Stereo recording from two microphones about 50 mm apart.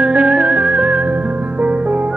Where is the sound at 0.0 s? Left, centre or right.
Right.